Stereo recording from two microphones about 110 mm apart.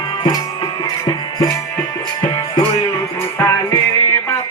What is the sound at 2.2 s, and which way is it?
Music, 50° left (ahead or behind).